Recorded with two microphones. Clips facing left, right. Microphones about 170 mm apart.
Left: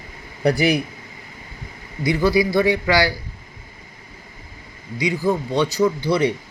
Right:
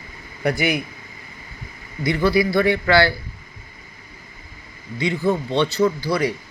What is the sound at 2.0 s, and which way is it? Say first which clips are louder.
Speech: left 1 dB; 15° left (ahead or behind).